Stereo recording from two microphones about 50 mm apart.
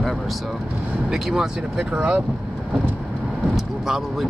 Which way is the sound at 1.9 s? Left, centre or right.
Right.